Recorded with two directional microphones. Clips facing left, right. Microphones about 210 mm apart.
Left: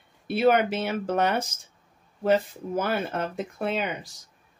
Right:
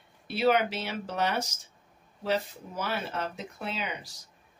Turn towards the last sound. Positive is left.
turn(degrees=50)  # may be behind; listen again after turning